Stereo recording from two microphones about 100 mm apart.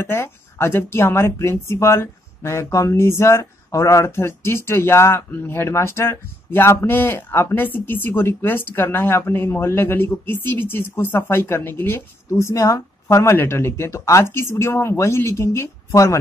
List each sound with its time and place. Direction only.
0.0 s speech: 25° left (ahead or behind)